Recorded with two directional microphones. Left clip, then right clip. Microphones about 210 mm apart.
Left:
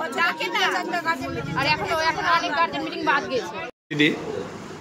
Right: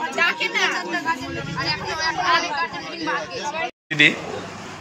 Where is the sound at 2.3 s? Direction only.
40° left (ahead or behind).